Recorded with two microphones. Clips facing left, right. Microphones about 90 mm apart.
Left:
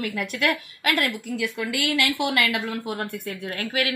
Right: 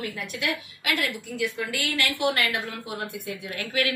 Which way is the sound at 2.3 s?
90° left.